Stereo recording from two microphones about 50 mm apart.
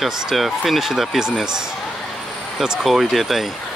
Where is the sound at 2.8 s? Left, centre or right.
Centre.